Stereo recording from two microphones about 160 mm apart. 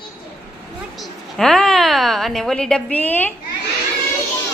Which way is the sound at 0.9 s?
5° left (ahead or behind).